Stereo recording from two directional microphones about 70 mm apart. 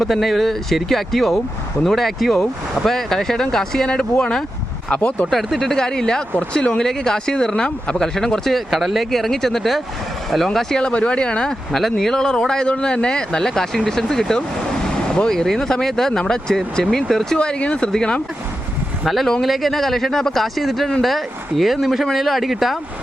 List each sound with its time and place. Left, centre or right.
0.0 s speech: centre
5.3 s speech: centre